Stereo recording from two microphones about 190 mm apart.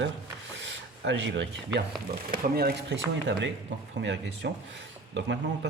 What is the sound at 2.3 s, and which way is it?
Speech, 55° right (ahead or behind).